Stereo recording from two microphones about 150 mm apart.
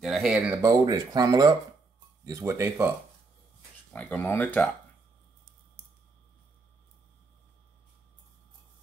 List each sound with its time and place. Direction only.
0.0 s speech: centre (ahead or behind)
0.6 s speech: 25° right (ahead or behind)
3.9 s speech: 10° left (ahead or behind)